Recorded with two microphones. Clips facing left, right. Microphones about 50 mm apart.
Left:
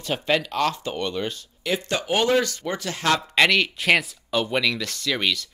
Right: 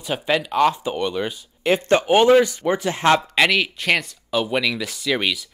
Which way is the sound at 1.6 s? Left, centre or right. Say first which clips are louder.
Right 8 dB; right.